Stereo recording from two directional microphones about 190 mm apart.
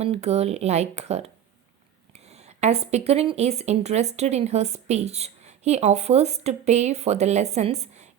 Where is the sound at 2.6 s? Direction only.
35° right (ahead or behind).